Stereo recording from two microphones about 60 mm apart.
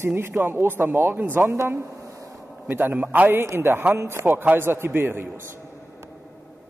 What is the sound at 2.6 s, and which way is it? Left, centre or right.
A man's voice, right.